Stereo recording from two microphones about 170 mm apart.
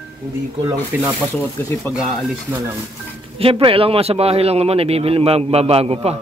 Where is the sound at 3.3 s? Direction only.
30° right (ahead or behind).